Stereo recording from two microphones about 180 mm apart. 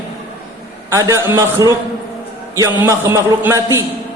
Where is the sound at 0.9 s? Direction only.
15° right (ahead or behind).